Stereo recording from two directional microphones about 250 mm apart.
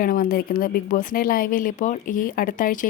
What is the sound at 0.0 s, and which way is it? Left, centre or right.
Speech, left.